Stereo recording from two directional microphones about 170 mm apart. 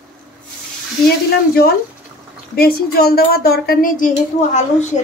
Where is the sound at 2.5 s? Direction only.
65° left (ahead or behind); by 4.8 s 45° left (ahead or behind).